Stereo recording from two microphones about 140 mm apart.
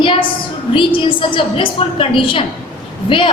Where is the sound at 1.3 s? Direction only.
40° left (ahead or behind).